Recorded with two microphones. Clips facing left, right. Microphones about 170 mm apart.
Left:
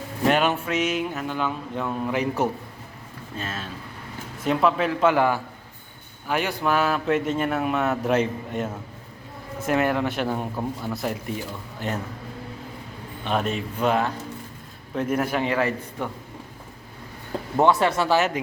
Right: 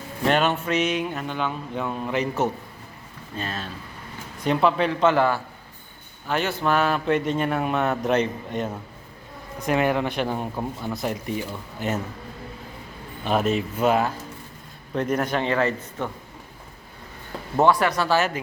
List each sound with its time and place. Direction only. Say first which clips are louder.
0.3 s a man's voice: even; 10° left (ahead or behind)
13.2 s a man's voice: right 3 dB; 5° right (ahead or behind)
14.9 s a man's voice: even; 5° left (ahead or behind)
17.6 s speech: even; 25° left (ahead or behind)